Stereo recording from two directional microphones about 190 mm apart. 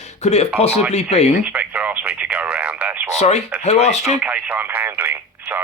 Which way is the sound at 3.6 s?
35° left (ahead or behind).